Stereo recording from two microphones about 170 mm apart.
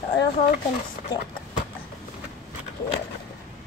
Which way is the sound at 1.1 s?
25° left (ahead or behind).